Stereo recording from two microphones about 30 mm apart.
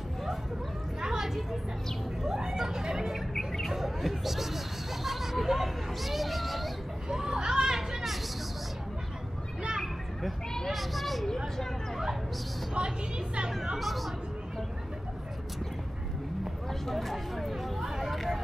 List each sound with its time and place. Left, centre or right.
1.0 s a sound: centre
2.2 s speech: right
3.0 s speech: centre
7.1 s children playing: centre
10.7 s a sound: centre
12.7 s a woman's voice: right
13.7 s speech: centre
16.8 s speech: centre
17.7 s a sound: centre